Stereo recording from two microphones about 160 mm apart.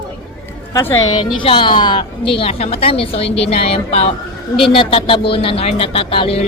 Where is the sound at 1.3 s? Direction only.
30° left (ahead or behind).